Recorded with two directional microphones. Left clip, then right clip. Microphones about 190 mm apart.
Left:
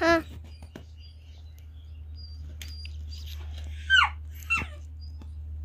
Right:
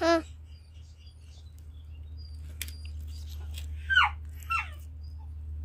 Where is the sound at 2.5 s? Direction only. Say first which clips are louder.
Right 1 dB; 5° left (ahead or behind).